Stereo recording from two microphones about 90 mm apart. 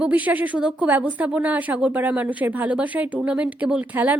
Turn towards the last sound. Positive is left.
turn(degrees=-20)  # may be behind; listen again after turning